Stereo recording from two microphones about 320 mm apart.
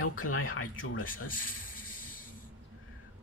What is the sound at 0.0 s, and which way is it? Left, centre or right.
Speech, left.